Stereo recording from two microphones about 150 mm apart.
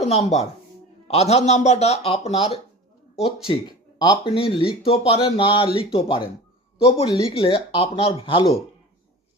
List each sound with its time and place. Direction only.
0.1 s speech: 45° left (ahead or behind)
3.5 s speech: 30° left (ahead or behind)